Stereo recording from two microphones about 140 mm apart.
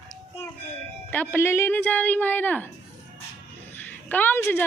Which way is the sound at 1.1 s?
10° left (ahead or behind).